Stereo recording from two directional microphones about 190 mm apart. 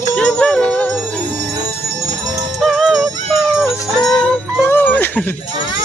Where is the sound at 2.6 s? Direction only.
Centre (ahead or behind).